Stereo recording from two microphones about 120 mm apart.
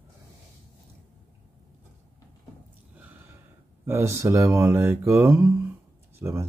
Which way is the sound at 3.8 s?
20° right (ahead or behind).